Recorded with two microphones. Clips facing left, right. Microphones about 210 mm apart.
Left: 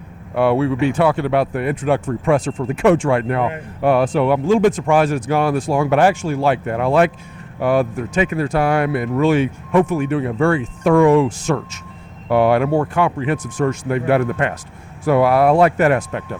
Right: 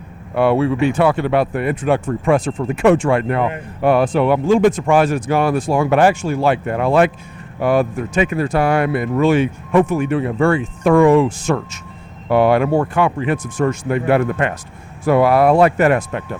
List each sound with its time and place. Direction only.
0.5 s speech: 15° right (ahead or behind)